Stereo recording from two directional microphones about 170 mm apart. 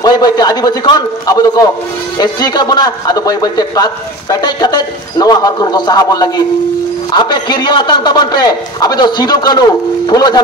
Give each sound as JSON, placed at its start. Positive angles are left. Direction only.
{"t": 0.0, "sound": "a man's voice", "side_deg": 25}